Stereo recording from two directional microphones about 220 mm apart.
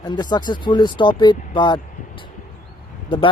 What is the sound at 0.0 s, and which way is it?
Speech, 20° left (ahead or behind).